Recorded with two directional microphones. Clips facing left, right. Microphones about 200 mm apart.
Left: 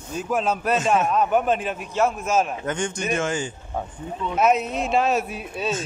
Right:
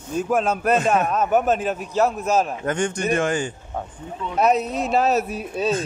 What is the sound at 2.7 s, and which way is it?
Speech, 60° right (ahead or behind).